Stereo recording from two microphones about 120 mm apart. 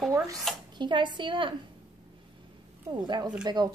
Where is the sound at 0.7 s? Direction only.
40° right (ahead or behind).